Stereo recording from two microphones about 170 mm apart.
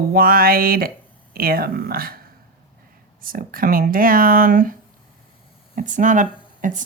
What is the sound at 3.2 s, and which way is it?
Speech, 55° right (ahead or behind).